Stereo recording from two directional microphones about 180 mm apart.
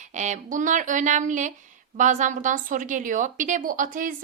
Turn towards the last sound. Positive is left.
turn(degrees=-50)  # may be behind; listen again after turning